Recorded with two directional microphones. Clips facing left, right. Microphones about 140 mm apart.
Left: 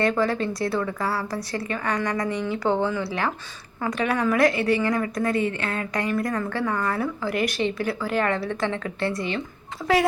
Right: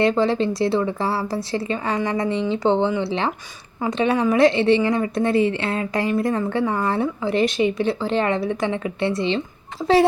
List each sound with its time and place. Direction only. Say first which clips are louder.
0.0 s a woman's voice: right 4 dB; 25° right (ahead or behind)